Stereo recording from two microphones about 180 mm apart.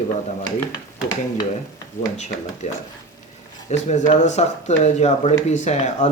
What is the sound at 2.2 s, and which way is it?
Speech, 40° left (ahead or behind).